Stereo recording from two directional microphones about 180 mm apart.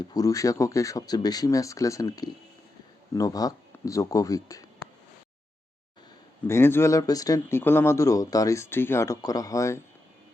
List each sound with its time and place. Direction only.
0.0 s speech: 20° left (ahead or behind)
6.5 s speech: 15° left (ahead or behind)